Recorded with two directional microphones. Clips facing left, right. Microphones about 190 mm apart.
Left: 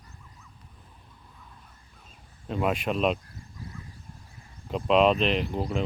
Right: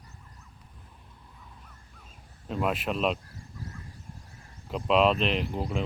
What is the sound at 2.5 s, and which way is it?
Speech, centre (ahead or behind).